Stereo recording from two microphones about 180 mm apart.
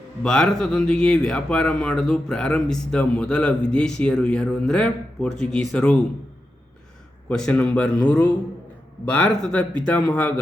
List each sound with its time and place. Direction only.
0.2 s speech: 5° left (ahead or behind)
7.3 s speech: 5° left (ahead or behind)